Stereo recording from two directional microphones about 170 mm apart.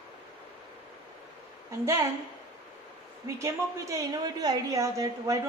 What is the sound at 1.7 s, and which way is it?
Speech, 15° right (ahead or behind).